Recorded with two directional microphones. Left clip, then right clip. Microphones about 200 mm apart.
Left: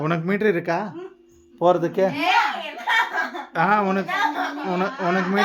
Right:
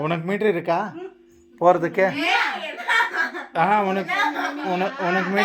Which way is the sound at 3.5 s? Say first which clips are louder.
Even; 20° left (ahead or behind).